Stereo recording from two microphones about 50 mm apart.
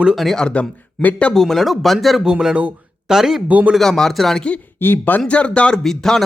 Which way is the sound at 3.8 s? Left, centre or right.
Centre.